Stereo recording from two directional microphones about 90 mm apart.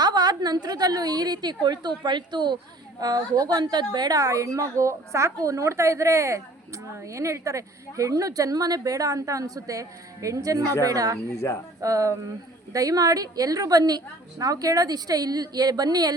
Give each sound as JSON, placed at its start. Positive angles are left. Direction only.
{"t": 0.0, "sound": "a woman's voice", "side_deg": -50}
{"t": 3.0, "sound": "a woman's voice", "side_deg": -45}